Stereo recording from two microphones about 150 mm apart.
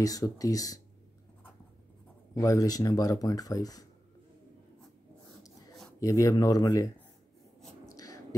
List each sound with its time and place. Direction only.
0.0 s speech: 25° left (ahead or behind)
2.3 s speech: 20° left (ahead or behind)
5.9 s speech: 20° left (ahead or behind)
7.8 s a sound: 25° left (ahead or behind)